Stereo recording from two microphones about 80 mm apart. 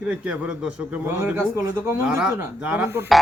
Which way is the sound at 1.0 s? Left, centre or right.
Right.